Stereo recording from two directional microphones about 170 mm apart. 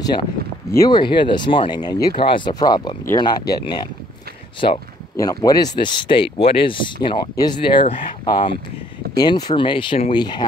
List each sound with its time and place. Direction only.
0.7 s speech: 20° left (ahead or behind)
5.1 s speech: 20° left (ahead or behind)